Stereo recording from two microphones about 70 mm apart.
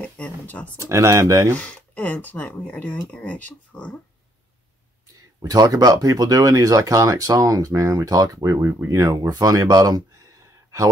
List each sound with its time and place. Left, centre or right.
0.0 s a sound: centre
0.7 s speech: right
1.6 s speech: left
5.4 s speech: right
8.5 s speech: right
8.8 s speech: right